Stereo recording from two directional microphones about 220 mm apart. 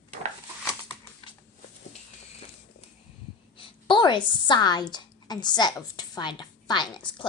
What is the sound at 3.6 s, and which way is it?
A woman's voice, 20° left (ahead or behind).